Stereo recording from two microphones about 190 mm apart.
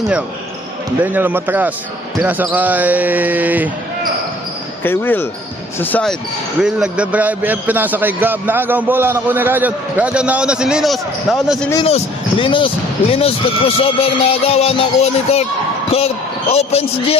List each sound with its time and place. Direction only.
1.0 s a man's voice: 10° right (ahead or behind)
4.8 s a man's voice: 10° left (ahead or behind)
11.9 s speech: 30° left (ahead or behind)
16.5 s speech: 35° left (ahead or behind)